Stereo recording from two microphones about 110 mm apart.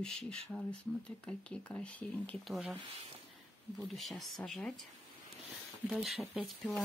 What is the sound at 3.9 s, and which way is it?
Speech, centre (ahead or behind).